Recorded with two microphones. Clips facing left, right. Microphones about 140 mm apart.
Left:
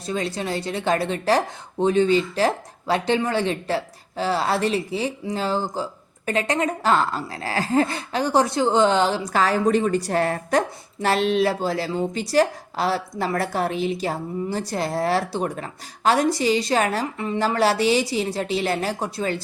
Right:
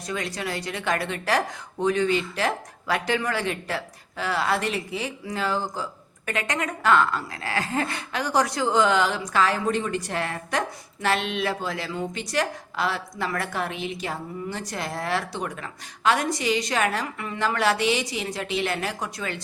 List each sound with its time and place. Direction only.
0.0 s speech: 30° left (ahead or behind)